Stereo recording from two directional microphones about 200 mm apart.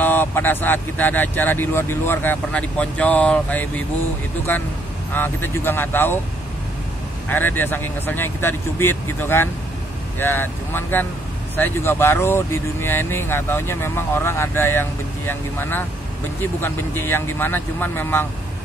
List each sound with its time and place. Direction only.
0.0 s speech: 10° left (ahead or behind)
5.1 s speech: 10° left (ahead or behind)
7.2 s speech: 10° left (ahead or behind)